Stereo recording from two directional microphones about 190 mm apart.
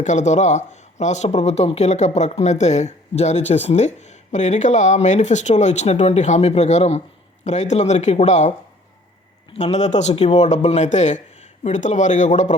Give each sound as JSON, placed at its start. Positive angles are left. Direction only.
{"t": 0.0, "sound": "speech", "side_deg": 40}